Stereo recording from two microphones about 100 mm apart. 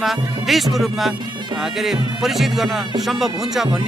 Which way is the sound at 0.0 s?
Centre (ahead or behind).